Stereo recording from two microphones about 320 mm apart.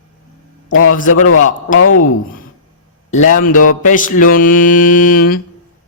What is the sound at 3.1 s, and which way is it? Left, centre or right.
Mantra, left.